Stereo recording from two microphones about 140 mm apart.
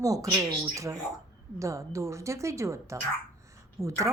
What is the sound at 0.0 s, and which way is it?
A woman's voice, 25° right (ahead or behind).